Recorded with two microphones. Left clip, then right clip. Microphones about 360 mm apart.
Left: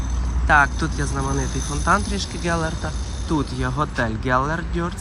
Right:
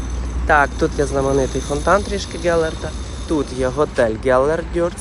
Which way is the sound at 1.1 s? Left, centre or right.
Right.